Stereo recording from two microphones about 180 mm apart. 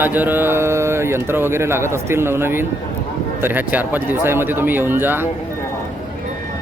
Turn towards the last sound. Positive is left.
turn(degrees=-10)  # may be behind; listen again after turning